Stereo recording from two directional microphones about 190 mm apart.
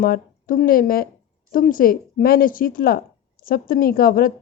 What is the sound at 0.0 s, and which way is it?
A woman's voice, 45° left (ahead or behind).